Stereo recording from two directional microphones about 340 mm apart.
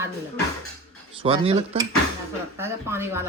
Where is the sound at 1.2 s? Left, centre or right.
Centre.